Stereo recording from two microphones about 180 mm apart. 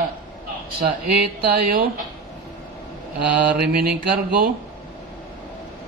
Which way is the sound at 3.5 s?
60° right (ahead or behind).